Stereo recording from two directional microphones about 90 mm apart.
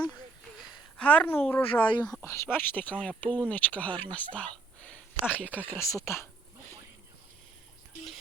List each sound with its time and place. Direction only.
0.9 s a woman's voice: 15° left (ahead or behind)
5.9 s speech: 35° left (ahead or behind)